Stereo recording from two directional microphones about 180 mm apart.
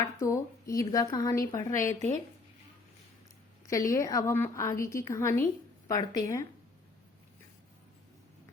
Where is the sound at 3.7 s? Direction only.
15° left (ahead or behind).